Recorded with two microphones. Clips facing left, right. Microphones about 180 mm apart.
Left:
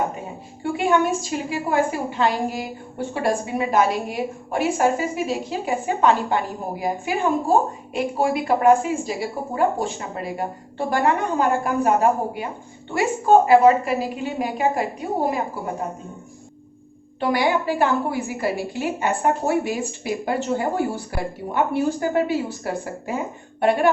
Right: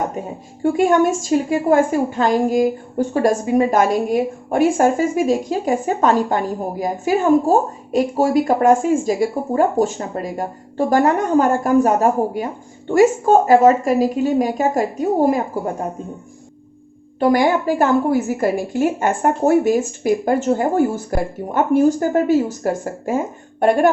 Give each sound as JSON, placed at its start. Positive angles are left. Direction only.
{"t": 0.6, "sound": "a woman's voice", "side_deg": -45}
{"t": 17.2, "sound": "a woman's voice", "side_deg": -45}